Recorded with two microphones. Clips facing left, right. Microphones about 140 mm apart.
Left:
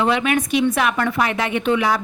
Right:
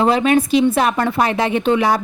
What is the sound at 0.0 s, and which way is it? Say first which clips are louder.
A woman's voice: right 4 dB; 35° right (ahead or behind).